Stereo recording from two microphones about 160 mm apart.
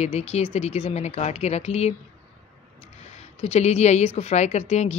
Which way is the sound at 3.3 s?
40° left (ahead or behind).